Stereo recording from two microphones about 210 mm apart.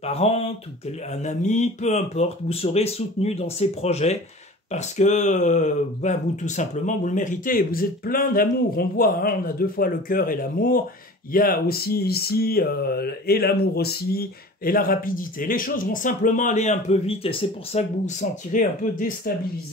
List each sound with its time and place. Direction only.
0.0 s speech: 30° left (ahead or behind)